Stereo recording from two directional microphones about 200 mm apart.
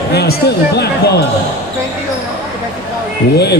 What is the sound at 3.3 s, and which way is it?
Speech, 55° left (ahead or behind).